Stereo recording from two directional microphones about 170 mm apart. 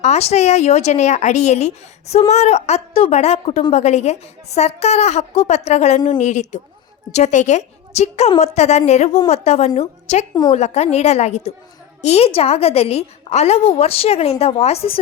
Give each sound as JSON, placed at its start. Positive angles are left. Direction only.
{"t": 0.0, "sound": "a woman's voice", "side_deg": 40}